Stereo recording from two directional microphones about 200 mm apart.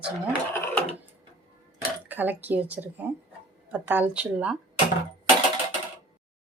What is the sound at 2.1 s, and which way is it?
A woman's voice, 10° right (ahead or behind).